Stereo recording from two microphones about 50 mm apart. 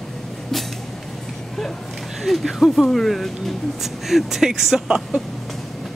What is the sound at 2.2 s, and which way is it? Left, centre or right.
Speech, centre.